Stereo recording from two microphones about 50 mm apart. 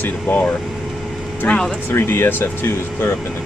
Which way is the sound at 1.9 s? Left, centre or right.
Left.